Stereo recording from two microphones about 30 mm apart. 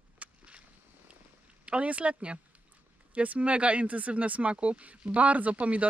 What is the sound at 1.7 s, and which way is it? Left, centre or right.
Speech, right.